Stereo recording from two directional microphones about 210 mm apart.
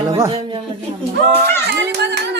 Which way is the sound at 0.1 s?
25° right (ahead or behind).